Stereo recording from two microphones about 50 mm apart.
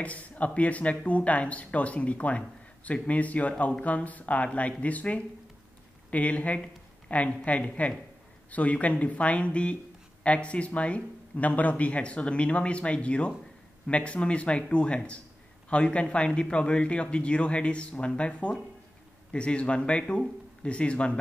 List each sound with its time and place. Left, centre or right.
0.0 s speech: left